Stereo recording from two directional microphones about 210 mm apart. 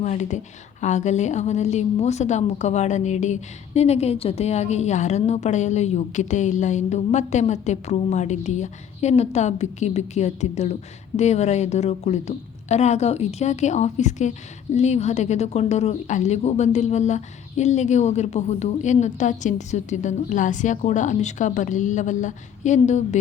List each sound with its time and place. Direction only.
0.0 s a woman's voice: 35° left (ahead or behind)